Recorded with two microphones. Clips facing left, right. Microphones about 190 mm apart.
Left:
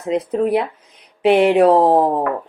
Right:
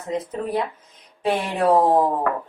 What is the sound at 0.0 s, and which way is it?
Speech, 70° left (ahead or behind).